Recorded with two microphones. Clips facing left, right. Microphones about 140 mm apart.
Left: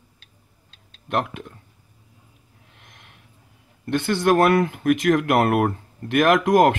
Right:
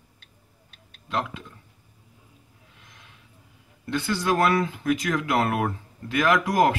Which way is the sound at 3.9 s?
60° left (ahead or behind).